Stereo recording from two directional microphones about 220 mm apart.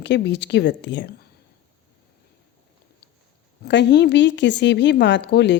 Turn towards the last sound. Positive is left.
turn(degrees=50)  # may be behind; listen again after turning